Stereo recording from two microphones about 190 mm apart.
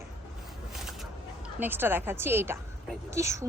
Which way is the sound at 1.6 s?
10° right (ahead or behind).